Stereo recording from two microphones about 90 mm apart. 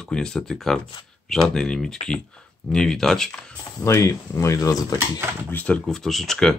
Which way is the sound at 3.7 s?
35° left (ahead or behind).